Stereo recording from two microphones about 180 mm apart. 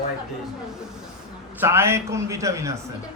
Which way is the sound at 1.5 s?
15° right (ahead or behind).